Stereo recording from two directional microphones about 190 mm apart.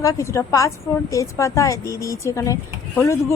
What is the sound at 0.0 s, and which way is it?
A woman's voice, 15° left (ahead or behind).